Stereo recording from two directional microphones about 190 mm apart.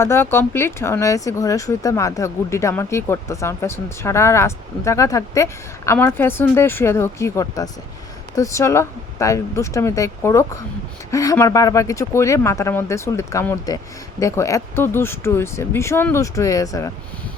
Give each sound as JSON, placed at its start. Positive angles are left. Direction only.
{"t": 0.0, "sound": "speech", "side_deg": 15}